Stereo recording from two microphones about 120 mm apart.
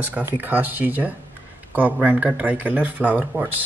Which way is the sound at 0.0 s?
15° right (ahead or behind).